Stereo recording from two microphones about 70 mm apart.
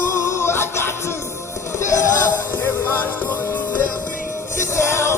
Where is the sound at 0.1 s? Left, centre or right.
Left.